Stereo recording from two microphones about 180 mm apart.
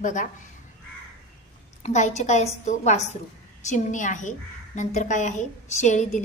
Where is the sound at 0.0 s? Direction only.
45° left (ahead or behind).